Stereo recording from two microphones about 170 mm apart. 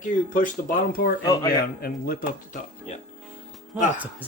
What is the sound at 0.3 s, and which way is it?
Speech, 50° left (ahead or behind).